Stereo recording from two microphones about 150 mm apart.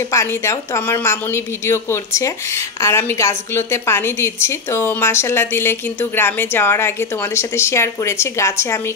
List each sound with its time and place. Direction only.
0.1 s a woman's voice: 20° left (ahead or behind)